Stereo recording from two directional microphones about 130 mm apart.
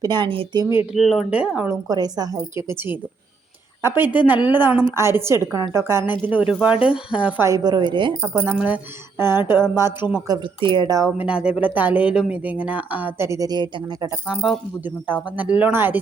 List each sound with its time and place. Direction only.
0.0 s speech: 35° right (ahead or behind)
0.9 s speech: centre (ahead or behind)
1.9 s a woman's voice: 30° right (ahead or behind); by 7.4 s 10° right (ahead or behind)
7.4 s speech: 30° right (ahead or behind)
8.4 s speech: 15° right (ahead or behind)
10.2 s speech: 35° right (ahead or behind)
11.2 s speech: 10° right (ahead or behind); by 14.1 s 35° right (ahead or behind)
14.3 s speech: 5° right (ahead or behind)